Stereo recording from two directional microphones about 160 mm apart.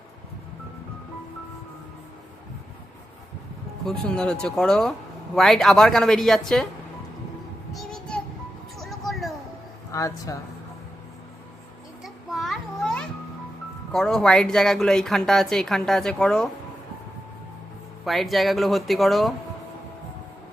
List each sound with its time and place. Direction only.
3.8 s a man's voice: 5° left (ahead or behind)
7.7 s child singing: centre (ahead or behind)
8.8 s a sound: centre (ahead or behind)
9.9 s a woman's voice: 20° left (ahead or behind)
12.0 s a sound: centre (ahead or behind)
13.9 s a man's voice: 5° left (ahead or behind)
18.0 s a man's voice: centre (ahead or behind)